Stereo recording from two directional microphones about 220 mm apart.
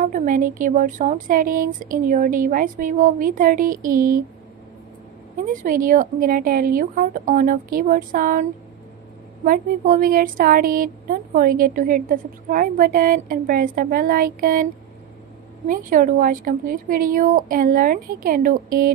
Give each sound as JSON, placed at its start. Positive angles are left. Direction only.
{"t": 0.0, "sound": "speech", "side_deg": -35}
{"t": 5.4, "sound": "speech", "side_deg": -35}